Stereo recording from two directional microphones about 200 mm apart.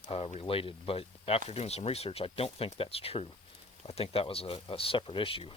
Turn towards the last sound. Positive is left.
turn(degrees=25)  # may be behind; listen again after turning